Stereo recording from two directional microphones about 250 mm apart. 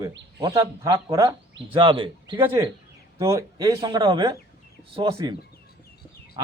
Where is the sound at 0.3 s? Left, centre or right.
Centre.